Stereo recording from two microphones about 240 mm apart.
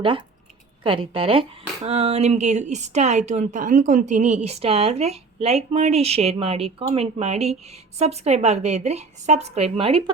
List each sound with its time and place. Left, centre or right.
0.9 s speech: right